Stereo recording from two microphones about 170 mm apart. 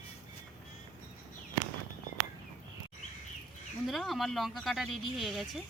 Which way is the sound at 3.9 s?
Centre (ahead or behind).